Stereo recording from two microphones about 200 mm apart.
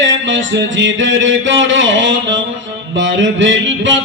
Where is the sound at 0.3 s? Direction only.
70° right (ahead or behind).